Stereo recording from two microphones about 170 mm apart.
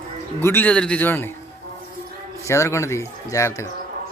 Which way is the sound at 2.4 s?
15° left (ahead or behind).